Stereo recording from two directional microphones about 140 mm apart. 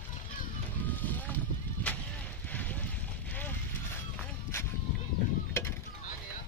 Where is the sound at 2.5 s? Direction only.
10° left (ahead or behind).